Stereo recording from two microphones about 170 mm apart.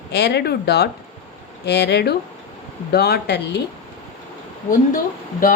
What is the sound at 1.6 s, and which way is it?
Speech, 85° left.